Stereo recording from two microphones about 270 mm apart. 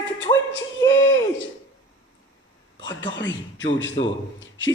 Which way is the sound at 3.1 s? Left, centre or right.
Left.